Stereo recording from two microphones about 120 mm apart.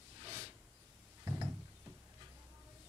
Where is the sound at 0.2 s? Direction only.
25° right (ahead or behind).